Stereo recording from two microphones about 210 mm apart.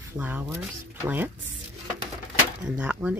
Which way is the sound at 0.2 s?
10° right (ahead or behind).